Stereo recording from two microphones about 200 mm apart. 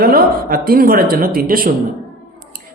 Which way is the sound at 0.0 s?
45° right (ahead or behind).